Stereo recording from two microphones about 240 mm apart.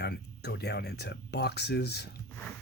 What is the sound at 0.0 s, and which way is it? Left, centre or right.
Speech, left.